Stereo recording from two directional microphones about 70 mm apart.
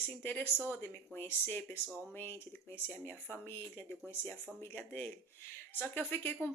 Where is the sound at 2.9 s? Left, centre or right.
Left.